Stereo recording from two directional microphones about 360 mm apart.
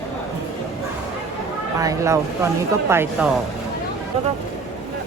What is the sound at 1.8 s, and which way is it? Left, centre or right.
Speech, centre.